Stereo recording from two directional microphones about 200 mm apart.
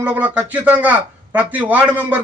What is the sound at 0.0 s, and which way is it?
A man's voice, 10° right (ahead or behind).